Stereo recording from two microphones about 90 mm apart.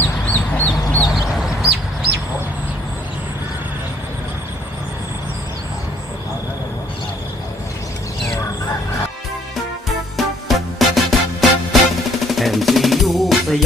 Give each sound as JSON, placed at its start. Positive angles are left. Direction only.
{"t": 0.0, "sound": "chicken", "side_deg": 20}
{"t": 1.1, "sound": "chicken", "side_deg": -5}
{"t": 10.2, "sound": "music", "side_deg": 0}